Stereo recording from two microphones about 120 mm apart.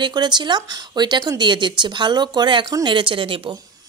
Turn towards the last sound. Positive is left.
turn(degrees=-45)  # may be behind; listen again after turning